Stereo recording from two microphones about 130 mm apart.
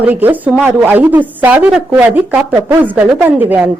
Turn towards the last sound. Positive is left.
turn(degrees=-10)  # may be behind; listen again after turning